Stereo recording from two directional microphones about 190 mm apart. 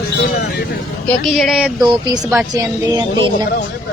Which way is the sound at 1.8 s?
20° right (ahead or behind).